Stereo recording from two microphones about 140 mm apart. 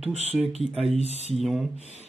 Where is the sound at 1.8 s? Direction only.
50° right (ahead or behind).